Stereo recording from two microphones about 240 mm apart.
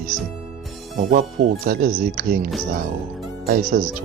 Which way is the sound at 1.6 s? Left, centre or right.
Right.